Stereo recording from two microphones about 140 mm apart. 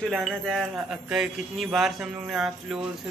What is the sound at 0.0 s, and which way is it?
A woman's voice, 5° left (ahead or behind).